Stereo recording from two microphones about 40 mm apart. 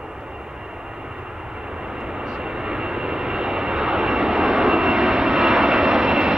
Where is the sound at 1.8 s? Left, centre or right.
Centre.